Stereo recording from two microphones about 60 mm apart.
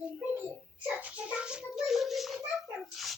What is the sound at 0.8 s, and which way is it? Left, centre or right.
A child's voice, right.